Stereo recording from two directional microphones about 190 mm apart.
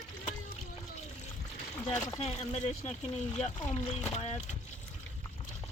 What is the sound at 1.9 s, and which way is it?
Speech, 15° left (ahead or behind).